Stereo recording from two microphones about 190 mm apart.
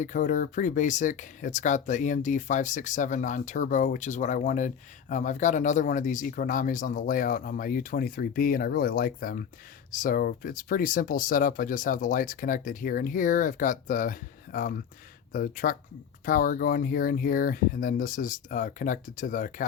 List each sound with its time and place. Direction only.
0.0 s speech: 40° left (ahead or behind)